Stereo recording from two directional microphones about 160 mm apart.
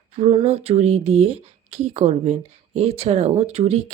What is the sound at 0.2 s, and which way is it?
Speech, 40° right (ahead or behind).